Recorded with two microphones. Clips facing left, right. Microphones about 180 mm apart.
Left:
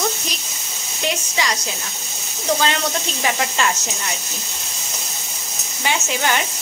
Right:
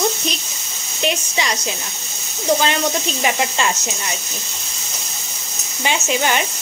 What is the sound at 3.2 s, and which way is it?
Speech, 20° right (ahead or behind).